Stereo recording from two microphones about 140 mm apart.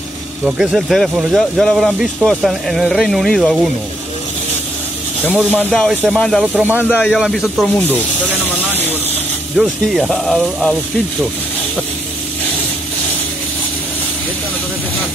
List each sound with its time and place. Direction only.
0.6 s speech: 5° right (ahead or behind)
5.3 s speech: 15° right (ahead or behind)
5.7 s speech: centre (ahead or behind)
6.4 s speech: 10° right (ahead or behind)
9.6 s speech: centre (ahead or behind)